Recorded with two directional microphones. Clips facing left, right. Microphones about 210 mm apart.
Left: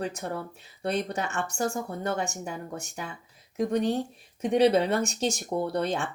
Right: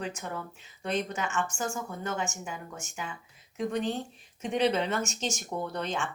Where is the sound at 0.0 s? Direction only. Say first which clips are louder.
Left 4 dB; 40° left (ahead or behind).